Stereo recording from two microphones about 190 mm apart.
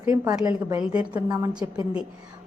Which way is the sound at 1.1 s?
20° right (ahead or behind).